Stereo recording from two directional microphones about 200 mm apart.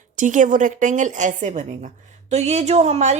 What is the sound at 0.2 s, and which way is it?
A woman's voice, 40° right (ahead or behind).